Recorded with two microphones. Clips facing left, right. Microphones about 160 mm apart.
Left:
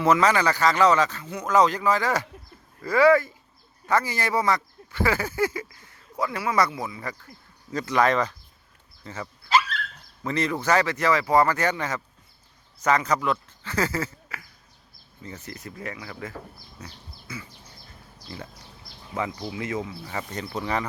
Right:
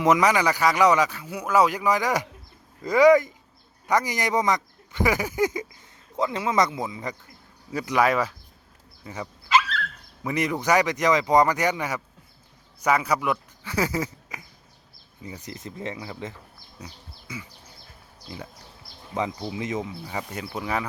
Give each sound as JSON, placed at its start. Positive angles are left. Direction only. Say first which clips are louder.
{"t": 0.0, "sound": "speech", "louder": "even", "side_deg": -15}
{"t": 16.8, "sound": "a sound", "louder": "right 1 dB", "side_deg": -15}
{"t": 18.3, "sound": "speech", "louder": "right 1 dB", "side_deg": -15}